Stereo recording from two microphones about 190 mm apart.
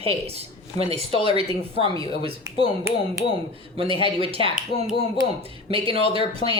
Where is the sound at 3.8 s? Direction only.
30° right (ahead or behind).